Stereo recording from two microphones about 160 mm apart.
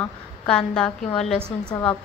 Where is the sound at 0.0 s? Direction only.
5° left (ahead or behind).